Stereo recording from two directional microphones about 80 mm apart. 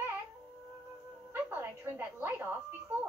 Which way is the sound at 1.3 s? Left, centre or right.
Right.